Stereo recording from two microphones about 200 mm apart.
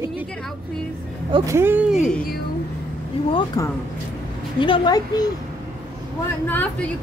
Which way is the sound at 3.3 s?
20° left (ahead or behind).